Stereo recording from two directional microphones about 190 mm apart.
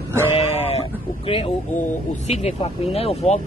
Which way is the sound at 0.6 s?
30° left (ahead or behind).